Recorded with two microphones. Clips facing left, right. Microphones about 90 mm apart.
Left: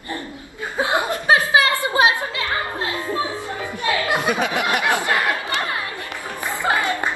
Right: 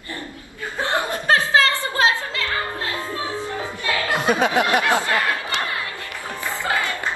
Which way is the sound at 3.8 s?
20° left (ahead or behind).